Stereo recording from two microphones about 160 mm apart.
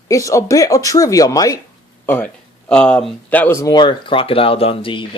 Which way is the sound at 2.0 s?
10° left (ahead or behind).